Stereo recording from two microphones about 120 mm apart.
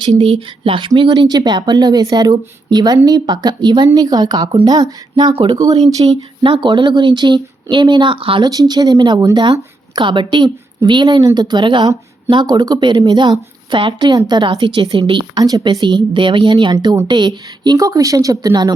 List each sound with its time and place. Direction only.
0.1 s a woman's voice: 55° right (ahead or behind); by 5.3 s 35° right (ahead or behind)
5.3 s speech: 50° right (ahead or behind)
5.5 s speech: 30° right (ahead or behind)
6.4 s a woman's voice: 45° right (ahead or behind)
8.4 s a woman's voice: 35° right (ahead or behind)